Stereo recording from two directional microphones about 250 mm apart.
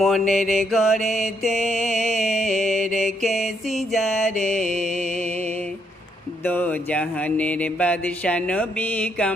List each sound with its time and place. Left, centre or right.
0.0 s mantra: centre
6.4 s mantra: centre